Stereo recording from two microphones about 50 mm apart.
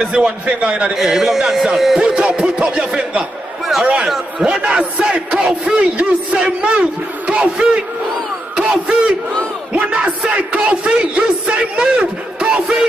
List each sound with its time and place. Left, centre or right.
0.0 s a man's voice: centre
0.9 s a man's voice: centre
2.0 s speech: centre
4.0 s speech: centre
4.5 s a man's voice: right
8.5 s crowd: centre
9.7 s battle cry: right
10.5 s a man's voice: centre